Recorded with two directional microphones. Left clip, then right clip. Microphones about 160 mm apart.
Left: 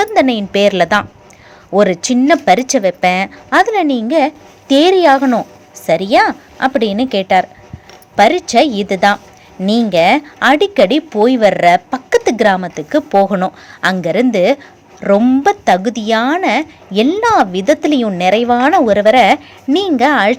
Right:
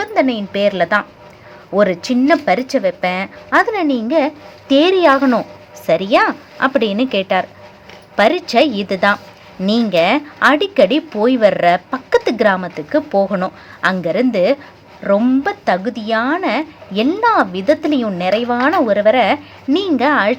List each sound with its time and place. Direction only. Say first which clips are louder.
0.0 s speech: left 4 dB; 25° left (ahead or behind)